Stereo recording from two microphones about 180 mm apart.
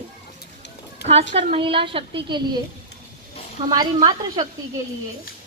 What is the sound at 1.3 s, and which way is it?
A woman's voice, 30° right (ahead or behind).